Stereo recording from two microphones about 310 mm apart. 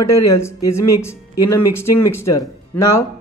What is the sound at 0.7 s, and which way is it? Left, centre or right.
Speech, centre.